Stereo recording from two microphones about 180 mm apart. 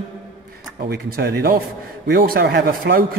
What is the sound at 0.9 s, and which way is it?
A man's voice, 60° right (ahead or behind).